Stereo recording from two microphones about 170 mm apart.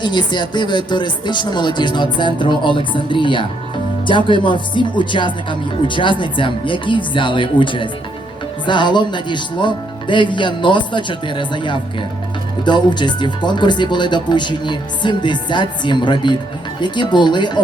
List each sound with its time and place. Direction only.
0.0 s speech: 25° left (ahead or behind)